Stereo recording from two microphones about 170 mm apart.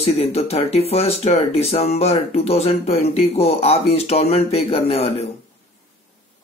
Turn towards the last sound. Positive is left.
turn(degrees=35)  # may be behind; listen again after turning